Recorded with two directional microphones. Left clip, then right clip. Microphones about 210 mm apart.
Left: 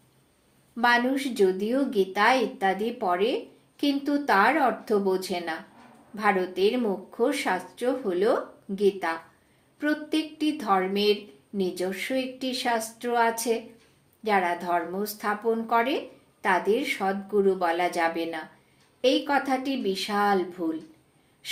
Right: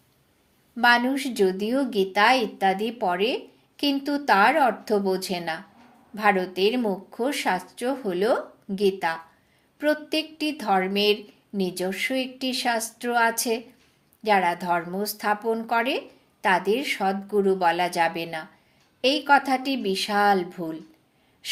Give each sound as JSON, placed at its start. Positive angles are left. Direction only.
{"t": 0.8, "sound": "a woman's voice", "side_deg": -40}